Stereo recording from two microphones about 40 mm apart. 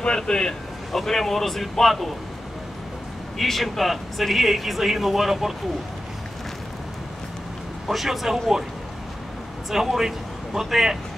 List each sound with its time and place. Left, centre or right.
0.0 s speech: left
0.9 s speech: centre
3.3 s speech: centre
7.9 s speech: centre
9.7 s speech: centre